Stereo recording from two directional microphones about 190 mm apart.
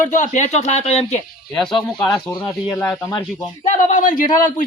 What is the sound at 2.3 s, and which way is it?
Speech, 20° left (ahead or behind).